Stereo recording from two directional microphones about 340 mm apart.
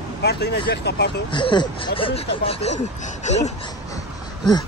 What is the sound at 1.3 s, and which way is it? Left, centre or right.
Speech, centre.